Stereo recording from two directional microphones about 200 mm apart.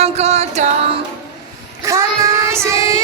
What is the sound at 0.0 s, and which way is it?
Music, 30° right (ahead or behind).